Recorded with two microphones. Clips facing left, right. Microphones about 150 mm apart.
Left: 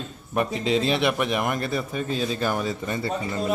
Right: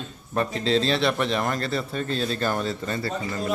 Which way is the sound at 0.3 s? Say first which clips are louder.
Even; 15° left (ahead or behind).